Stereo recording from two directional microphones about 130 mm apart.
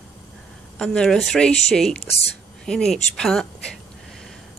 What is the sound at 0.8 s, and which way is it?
Speech, 5° left (ahead or behind).